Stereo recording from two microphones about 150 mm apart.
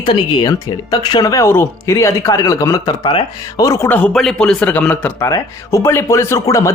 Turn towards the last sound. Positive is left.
turn(degrees=20)  # may be behind; listen again after turning